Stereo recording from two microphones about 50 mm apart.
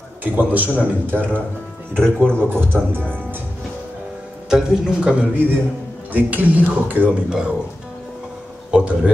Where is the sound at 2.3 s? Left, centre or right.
Right.